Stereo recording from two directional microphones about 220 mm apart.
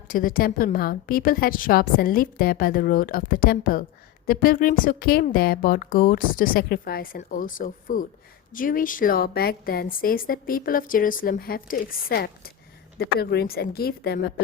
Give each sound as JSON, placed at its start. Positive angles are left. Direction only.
{"t": 0.1, "sound": "a woman's voice", "side_deg": 40}